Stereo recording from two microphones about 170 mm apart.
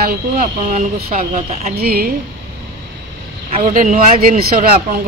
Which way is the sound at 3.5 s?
50° right (ahead or behind).